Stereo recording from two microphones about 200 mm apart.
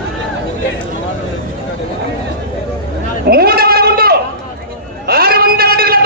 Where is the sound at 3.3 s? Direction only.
50° right (ahead or behind).